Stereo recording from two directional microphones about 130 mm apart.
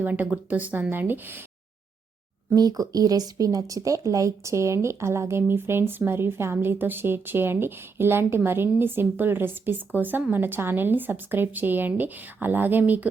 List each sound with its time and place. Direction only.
0.0 s speech: 10° right (ahead or behind)
2.5 s speech: 30° right (ahead or behind); by 13.1 s 15° right (ahead or behind)